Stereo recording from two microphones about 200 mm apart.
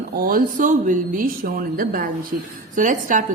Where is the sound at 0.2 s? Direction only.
45° right (ahead or behind).